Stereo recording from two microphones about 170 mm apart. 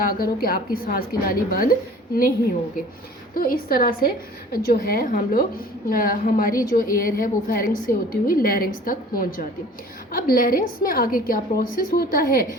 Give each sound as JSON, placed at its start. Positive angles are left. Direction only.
{"t": 0.0, "sound": "a woman's voice", "side_deg": 60}
{"t": 3.3, "sound": "a woman's voice", "side_deg": 60}